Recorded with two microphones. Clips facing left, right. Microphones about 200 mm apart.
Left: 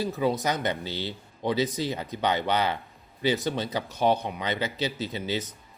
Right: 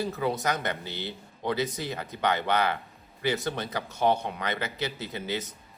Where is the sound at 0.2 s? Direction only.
20° left (ahead or behind).